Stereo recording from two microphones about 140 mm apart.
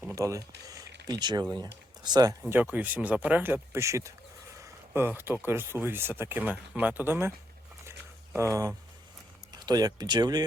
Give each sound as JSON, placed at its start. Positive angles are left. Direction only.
{"t": 0.2, "sound": "speech", "side_deg": -25}
{"t": 2.4, "sound": "speech", "side_deg": -10}
{"t": 4.6, "sound": "a sound", "side_deg": -15}
{"t": 5.5, "sound": "speech", "side_deg": -15}
{"t": 8.4, "sound": "speech", "side_deg": -20}